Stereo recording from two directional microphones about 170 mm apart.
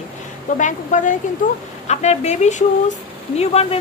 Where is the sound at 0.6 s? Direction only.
45° left (ahead or behind).